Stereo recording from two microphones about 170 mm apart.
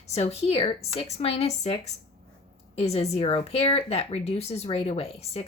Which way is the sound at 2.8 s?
40° left (ahead or behind).